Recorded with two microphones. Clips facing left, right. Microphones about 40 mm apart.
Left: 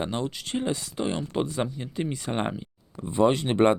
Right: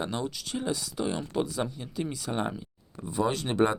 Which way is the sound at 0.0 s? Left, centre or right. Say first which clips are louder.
Left 3 dB; left.